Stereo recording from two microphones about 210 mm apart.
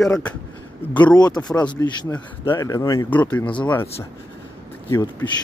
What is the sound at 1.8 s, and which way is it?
Speech, 15° left (ahead or behind).